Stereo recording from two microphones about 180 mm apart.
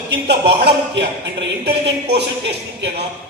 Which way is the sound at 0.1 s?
70° right (ahead or behind).